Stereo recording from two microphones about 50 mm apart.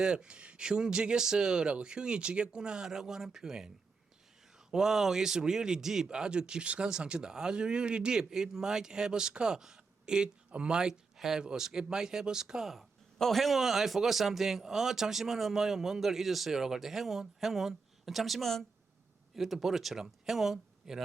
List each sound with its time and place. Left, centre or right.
0.0 s speech: centre
4.7 s speech: centre
13.1 s speech: centre